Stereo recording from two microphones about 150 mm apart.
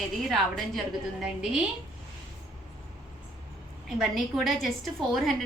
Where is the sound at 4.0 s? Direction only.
Centre (ahead or behind).